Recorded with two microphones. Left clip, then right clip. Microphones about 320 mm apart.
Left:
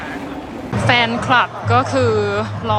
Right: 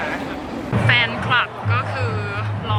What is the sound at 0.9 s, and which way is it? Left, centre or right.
Speech, centre.